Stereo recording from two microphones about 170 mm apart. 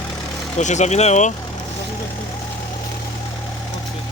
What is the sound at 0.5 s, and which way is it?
Speech, 45° left (ahead or behind).